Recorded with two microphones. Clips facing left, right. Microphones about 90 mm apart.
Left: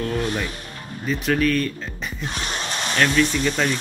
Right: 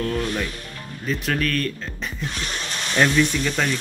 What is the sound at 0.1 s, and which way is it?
Music, 10° left (ahead or behind).